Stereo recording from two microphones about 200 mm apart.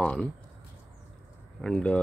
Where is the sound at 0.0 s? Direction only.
5° left (ahead or behind).